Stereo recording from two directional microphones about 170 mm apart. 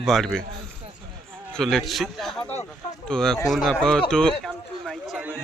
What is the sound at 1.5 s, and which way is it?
A man's voice, centre (ahead or behind).